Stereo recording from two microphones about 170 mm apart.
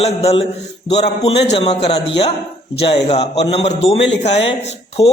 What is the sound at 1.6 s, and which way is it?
Speech, 35° left (ahead or behind).